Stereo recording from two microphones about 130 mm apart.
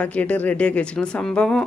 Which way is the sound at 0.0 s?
10° left (ahead or behind).